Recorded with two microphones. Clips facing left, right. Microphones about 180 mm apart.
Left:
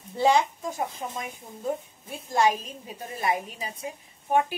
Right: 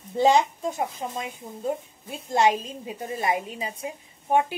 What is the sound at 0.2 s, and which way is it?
A woman's voice, 20° right (ahead or behind).